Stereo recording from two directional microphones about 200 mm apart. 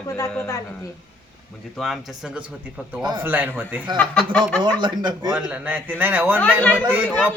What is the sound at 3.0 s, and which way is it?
Speech, 20° right (ahead or behind).